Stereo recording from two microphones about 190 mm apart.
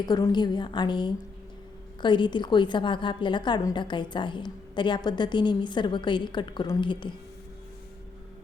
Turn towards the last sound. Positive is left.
turn(degrees=25)  # may be behind; listen again after turning